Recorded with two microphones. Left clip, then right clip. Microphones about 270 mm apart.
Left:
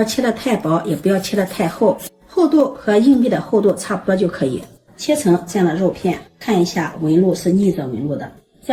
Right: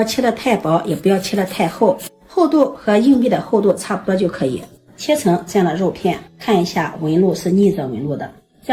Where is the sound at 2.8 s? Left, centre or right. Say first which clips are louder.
Even; centre.